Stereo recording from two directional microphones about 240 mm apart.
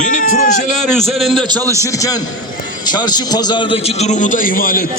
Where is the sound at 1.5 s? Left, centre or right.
Centre.